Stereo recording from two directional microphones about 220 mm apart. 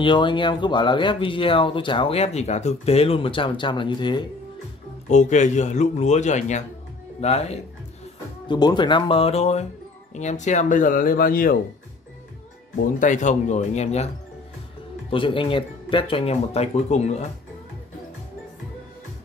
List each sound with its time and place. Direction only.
0.0 s speech: 20° left (ahead or behind)
5.0 s speech: 35° left (ahead or behind)
13.0 s speech: 35° left (ahead or behind)
15.0 s speech: 25° left (ahead or behind)